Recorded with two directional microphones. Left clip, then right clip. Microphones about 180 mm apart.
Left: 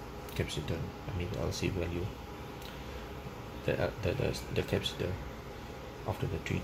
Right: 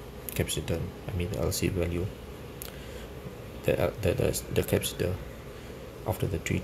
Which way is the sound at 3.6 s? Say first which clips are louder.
Right 6 dB; 20° right (ahead or behind).